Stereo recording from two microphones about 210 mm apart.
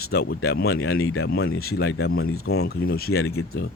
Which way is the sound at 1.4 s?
85° left.